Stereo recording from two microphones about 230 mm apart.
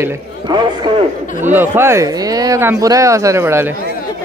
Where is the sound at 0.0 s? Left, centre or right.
Centre.